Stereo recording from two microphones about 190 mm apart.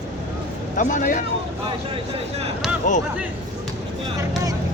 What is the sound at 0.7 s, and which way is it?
Speech, 40° left (ahead or behind).